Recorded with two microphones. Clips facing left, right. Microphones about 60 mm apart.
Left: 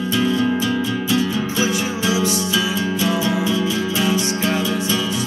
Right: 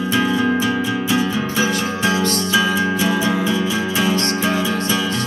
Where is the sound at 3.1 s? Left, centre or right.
Right.